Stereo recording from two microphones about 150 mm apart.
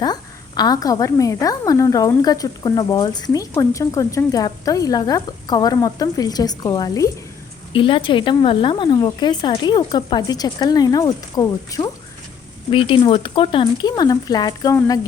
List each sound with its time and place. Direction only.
0.0 s speech: 30° left (ahead or behind)
7.7 s speech: 35° left (ahead or behind)
12.7 s speech: 35° left (ahead or behind)